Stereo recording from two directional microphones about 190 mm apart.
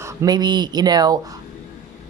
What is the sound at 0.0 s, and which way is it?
Speech, 15° right (ahead or behind).